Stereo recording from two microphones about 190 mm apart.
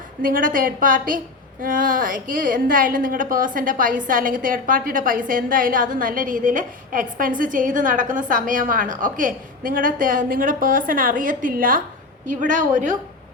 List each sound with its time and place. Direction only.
0.2 s a woman's voice: 45° right (ahead or behind)